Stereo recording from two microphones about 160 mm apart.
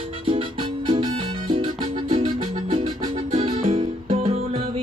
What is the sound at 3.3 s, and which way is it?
Music, 50° right (ahead or behind).